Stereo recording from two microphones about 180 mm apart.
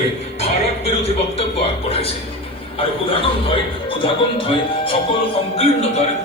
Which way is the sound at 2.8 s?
30° left (ahead or behind).